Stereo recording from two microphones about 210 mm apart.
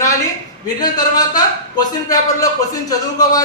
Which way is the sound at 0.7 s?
20° left (ahead or behind).